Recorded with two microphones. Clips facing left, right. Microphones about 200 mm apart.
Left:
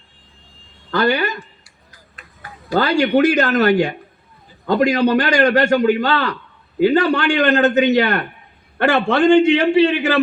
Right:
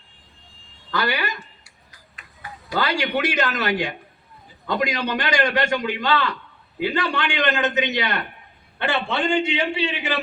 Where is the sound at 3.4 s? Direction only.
60° left (ahead or behind).